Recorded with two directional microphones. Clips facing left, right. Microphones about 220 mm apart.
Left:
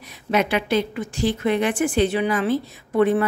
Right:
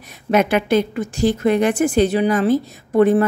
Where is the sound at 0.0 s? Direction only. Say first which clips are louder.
Right 5 dB; 50° right (ahead or behind).